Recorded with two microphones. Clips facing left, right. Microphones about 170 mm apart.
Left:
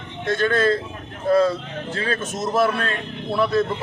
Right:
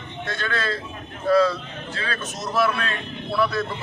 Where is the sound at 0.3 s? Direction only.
50° left (ahead or behind).